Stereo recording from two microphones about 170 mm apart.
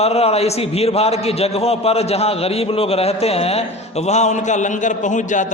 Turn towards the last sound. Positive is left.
turn(degrees=45)  # may be behind; listen again after turning